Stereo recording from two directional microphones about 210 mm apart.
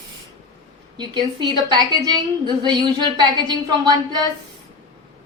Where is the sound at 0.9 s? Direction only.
20° right (ahead or behind).